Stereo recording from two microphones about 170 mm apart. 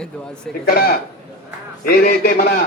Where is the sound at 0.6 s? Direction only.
60° left (ahead or behind).